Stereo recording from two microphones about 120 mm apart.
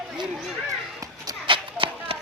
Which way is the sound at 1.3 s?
45° right (ahead or behind).